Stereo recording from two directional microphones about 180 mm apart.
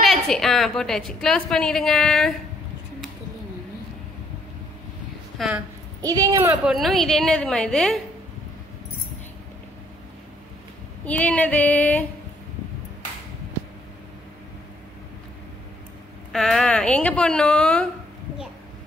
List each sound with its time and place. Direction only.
0.0 s a woman's voice: centre (ahead or behind)
5.4 s a woman's voice: centre (ahead or behind)
6.0 s speech: 20° right (ahead or behind)
6.6 s a woman's voice: centre (ahead or behind)
11.1 s female singing: 5° left (ahead or behind)
16.3 s a woman's voice: centre (ahead or behind)